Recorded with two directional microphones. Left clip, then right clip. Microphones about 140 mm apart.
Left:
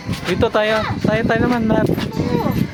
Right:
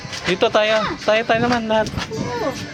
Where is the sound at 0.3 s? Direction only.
25° left (ahead or behind).